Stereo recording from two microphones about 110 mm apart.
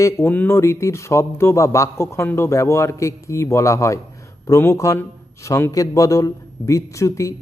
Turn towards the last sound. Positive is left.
turn(degrees=25)  # may be behind; listen again after turning